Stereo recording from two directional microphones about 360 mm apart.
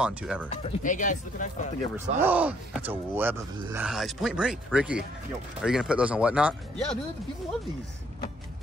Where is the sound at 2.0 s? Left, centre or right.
Centre.